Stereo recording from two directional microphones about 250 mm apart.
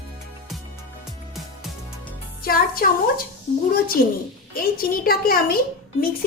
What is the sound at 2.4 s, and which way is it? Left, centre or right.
Music, left.